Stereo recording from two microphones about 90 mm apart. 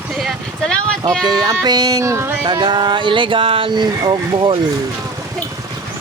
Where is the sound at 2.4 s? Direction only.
50° right (ahead or behind); by 3.7 s 85° right.